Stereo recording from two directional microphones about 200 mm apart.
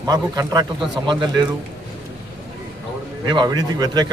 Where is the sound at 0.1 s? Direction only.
20° right (ahead or behind).